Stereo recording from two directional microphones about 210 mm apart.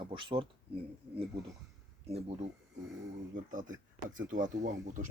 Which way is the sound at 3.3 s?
40° right (ahead or behind).